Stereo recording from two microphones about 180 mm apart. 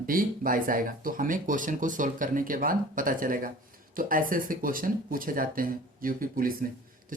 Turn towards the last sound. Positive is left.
turn(degrees=-50)  # may be behind; listen again after turning